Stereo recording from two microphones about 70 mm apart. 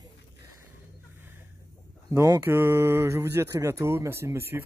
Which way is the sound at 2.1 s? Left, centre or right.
Right.